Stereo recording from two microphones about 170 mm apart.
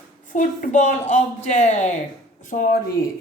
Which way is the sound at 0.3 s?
45° left (ahead or behind).